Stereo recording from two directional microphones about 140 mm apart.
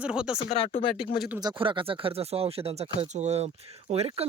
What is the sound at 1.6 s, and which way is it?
Speech, 35° right (ahead or behind).